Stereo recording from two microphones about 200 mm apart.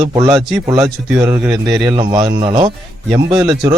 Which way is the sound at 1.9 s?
20° right (ahead or behind).